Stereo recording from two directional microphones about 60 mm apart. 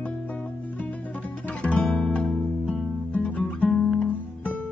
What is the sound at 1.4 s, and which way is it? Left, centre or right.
Music, left.